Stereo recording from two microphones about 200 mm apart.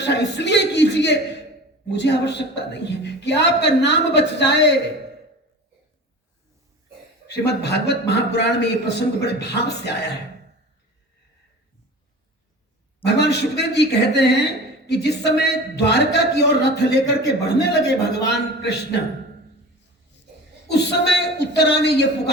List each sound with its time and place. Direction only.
0.0 s a man's voice: 60° left (ahead or behind)
7.3 s a man's voice: 55° left (ahead or behind)
13.1 s a man's voice: 55° left (ahead or behind)
20.7 s a man's voice: 55° left (ahead or behind)